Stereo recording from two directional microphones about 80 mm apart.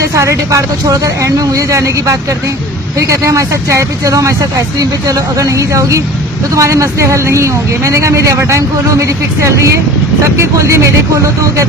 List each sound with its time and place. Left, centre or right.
0.1 s speech: right